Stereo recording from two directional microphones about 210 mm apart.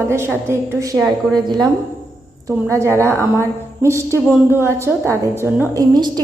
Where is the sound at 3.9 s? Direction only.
15° right (ahead or behind).